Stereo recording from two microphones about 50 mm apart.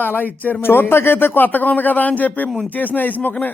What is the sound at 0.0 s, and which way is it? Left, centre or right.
Speech, left.